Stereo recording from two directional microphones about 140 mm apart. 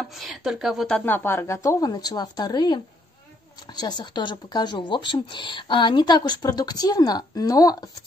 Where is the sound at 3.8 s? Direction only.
30° left (ahead or behind).